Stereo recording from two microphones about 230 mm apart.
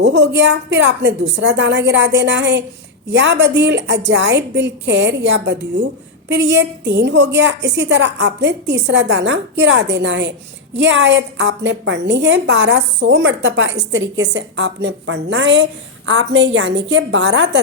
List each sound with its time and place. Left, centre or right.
0.0 s a woman's voice: right